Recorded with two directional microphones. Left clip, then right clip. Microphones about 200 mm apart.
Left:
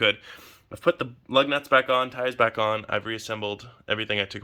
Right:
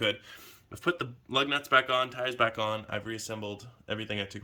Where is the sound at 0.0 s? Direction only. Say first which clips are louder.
Left 7 dB; 15° left (ahead or behind).